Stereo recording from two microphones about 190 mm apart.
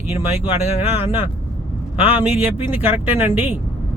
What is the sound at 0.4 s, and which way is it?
Speech, 35° left (ahead or behind).